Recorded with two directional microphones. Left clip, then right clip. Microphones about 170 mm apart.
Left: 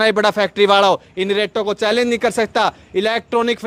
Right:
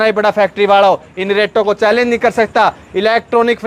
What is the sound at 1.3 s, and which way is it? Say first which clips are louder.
Speech: right 7 dB; 45° left (ahead or behind).